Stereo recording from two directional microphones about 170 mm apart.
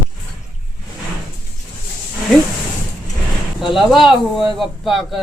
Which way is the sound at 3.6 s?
Centre (ahead or behind).